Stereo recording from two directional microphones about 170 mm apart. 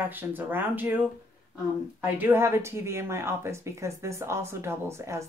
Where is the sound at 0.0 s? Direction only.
10° right (ahead or behind).